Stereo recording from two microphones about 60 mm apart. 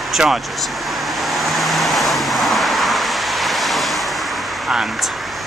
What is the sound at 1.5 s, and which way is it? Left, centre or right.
Vehicle, centre.